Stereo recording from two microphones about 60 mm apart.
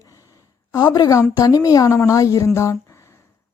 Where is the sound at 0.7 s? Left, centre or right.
Left.